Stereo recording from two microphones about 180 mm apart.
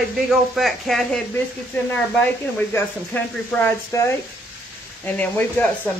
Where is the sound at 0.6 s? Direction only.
Centre (ahead or behind).